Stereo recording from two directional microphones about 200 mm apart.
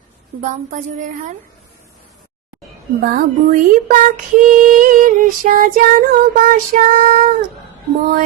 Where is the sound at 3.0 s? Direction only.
50° right (ahead or behind).